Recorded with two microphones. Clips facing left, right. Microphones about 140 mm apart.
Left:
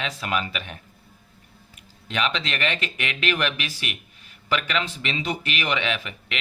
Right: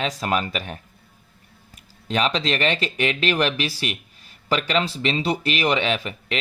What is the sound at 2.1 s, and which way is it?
Speech, 35° right (ahead or behind).